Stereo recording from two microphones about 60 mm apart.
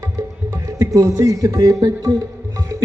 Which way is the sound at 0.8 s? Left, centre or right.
Right.